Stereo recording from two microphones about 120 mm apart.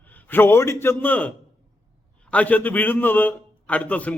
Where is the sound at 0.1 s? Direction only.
15° left (ahead or behind).